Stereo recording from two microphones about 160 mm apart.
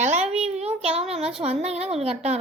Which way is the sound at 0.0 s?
45° right (ahead or behind).